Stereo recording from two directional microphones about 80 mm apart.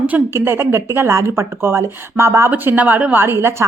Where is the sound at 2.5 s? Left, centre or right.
Right.